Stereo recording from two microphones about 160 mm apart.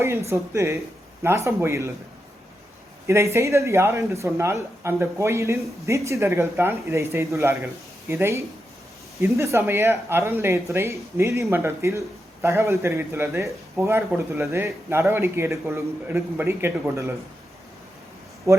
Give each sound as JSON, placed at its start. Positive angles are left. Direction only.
{"t": 0.0, "sound": "a man's voice", "side_deg": -15}
{"t": 3.1, "sound": "a man's voice", "side_deg": -15}
{"t": 18.5, "sound": "speech", "side_deg": -20}